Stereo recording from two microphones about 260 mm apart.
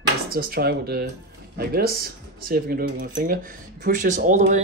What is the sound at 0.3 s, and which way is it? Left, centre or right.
Speech, right.